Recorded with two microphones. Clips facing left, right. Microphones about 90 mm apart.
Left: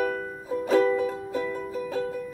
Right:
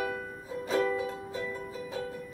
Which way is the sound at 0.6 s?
50° left (ahead or behind).